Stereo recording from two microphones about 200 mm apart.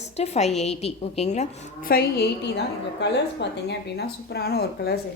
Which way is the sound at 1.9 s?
50° left (ahead or behind).